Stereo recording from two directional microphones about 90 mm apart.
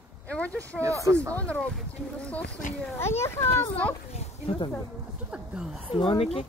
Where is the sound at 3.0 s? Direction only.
30° left (ahead or behind).